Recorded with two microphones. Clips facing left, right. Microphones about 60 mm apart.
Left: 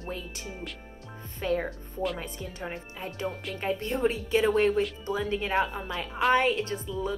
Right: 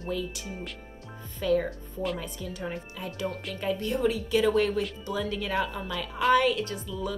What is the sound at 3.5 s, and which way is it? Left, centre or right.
A woman's voice, left.